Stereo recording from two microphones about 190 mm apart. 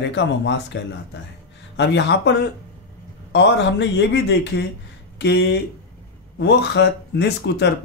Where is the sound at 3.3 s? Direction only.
65° left (ahead or behind).